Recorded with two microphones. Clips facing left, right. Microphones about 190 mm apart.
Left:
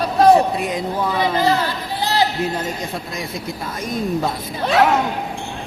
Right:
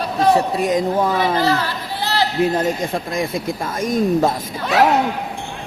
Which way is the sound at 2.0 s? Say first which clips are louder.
Left 2 dB; 15° left (ahead or behind).